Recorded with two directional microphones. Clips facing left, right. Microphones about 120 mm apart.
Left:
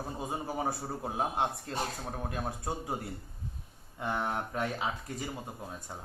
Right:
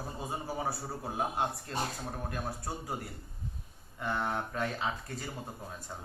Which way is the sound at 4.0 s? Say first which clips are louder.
Even; 15° left (ahead or behind).